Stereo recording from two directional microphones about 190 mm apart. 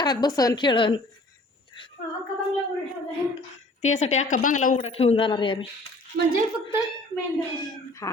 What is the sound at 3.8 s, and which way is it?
Speech, 35° left (ahead or behind).